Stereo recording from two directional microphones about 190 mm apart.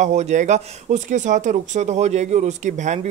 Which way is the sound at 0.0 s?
40° right (ahead or behind).